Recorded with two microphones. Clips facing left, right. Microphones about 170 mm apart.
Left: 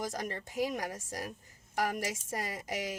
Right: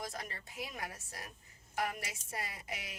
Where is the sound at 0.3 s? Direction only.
45° left (ahead or behind).